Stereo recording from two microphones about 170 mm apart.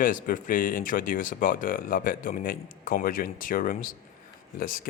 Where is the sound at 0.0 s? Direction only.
50° left (ahead or behind).